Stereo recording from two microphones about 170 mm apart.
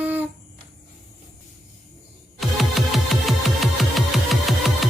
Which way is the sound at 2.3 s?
Centre (ahead or behind).